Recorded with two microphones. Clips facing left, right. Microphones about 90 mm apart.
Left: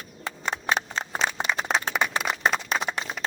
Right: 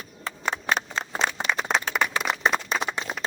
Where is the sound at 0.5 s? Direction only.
5° left (ahead or behind).